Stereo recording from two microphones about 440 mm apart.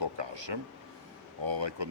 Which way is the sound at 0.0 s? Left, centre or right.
Right.